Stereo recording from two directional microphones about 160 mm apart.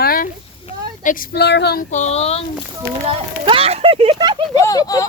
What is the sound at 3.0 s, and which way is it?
Speech, 35° right (ahead or behind).